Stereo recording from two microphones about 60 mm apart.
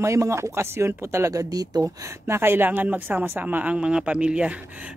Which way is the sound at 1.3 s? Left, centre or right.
Right.